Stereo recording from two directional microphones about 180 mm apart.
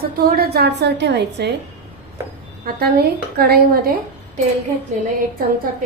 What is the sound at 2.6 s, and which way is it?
A woman's voice, 60° right (ahead or behind).